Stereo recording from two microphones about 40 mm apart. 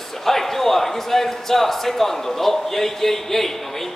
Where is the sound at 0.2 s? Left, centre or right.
Centre.